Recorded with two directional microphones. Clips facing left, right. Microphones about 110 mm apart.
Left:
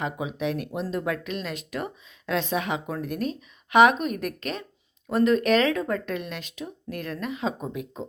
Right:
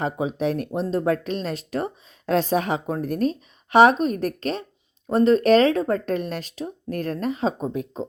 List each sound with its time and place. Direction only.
0.0 s speech: 35° right (ahead or behind)